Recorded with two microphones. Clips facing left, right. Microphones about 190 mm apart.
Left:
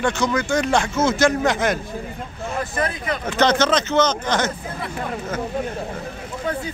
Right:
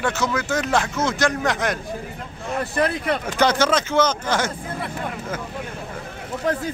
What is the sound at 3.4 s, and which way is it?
Speech, 10° right (ahead or behind).